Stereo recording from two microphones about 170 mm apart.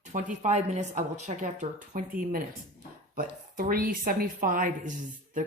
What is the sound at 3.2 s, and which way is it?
Speech, 55° right (ahead or behind).